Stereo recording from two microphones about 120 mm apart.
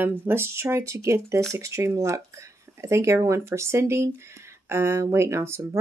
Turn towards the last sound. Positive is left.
turn(degrees=-20)  # may be behind; listen again after turning